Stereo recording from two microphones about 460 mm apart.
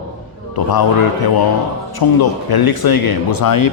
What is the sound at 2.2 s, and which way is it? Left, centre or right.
Speech, left.